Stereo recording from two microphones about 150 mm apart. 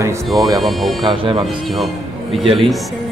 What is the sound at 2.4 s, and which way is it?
Speech, 35° right (ahead or behind).